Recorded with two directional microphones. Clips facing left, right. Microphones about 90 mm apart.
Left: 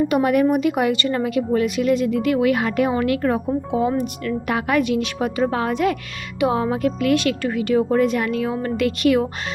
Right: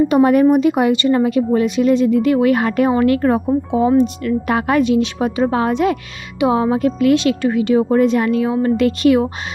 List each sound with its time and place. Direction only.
0.1 s speech: 30° right (ahead or behind)